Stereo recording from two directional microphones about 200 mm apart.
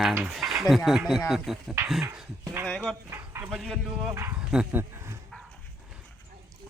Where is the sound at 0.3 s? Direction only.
Centre (ahead or behind).